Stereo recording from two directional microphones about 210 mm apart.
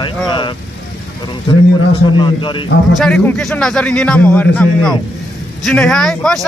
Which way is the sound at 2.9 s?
Centre (ahead or behind).